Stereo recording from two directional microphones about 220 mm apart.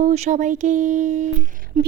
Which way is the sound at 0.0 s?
30° right (ahead or behind).